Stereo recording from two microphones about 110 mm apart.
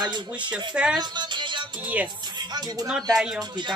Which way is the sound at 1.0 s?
45° right (ahead or behind).